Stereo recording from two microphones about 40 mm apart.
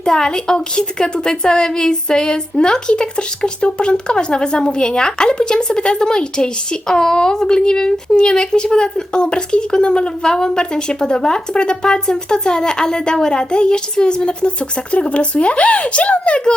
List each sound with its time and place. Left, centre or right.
0.0 s a woman's voice: centre